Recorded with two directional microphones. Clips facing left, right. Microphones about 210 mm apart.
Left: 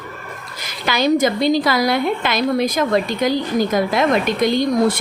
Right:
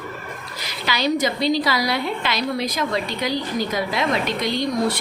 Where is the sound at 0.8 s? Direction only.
50° left (ahead or behind).